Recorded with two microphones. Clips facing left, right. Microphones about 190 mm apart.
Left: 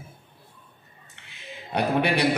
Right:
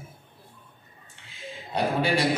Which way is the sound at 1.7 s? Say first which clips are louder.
Left 1 dB; 65° left (ahead or behind).